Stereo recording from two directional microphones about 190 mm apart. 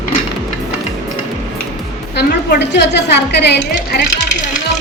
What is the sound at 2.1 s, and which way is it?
A woman's voice, 60° left (ahead or behind).